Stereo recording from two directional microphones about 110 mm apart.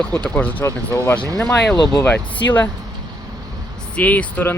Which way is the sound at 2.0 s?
15° left (ahead or behind).